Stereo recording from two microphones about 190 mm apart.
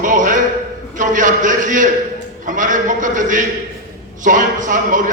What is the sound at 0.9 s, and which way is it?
A man's voice, 45° right (ahead or behind).